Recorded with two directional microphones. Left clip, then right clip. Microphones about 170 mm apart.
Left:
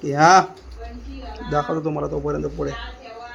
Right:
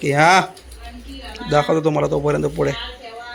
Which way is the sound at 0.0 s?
20° right (ahead or behind).